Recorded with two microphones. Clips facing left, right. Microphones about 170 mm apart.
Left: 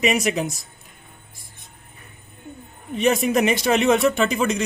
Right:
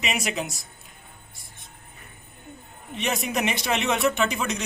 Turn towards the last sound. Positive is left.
turn(degrees=35)  # may be behind; listen again after turning